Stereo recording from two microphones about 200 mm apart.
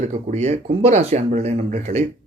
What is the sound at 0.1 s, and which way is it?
Speech, 35° right (ahead or behind).